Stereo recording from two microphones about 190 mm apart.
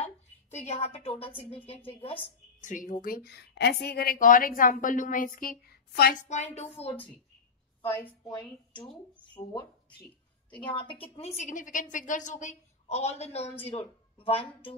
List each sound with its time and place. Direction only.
0.7 s speech: 35° left (ahead or behind)
2.6 s a woman's voice: 45° left (ahead or behind)
6.2 s a woman's voice: 35° left (ahead or behind)
8.3 s a woman's voice: 25° left (ahead or behind)